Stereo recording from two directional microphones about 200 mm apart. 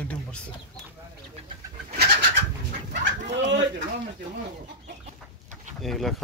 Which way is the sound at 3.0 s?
65° right (ahead or behind).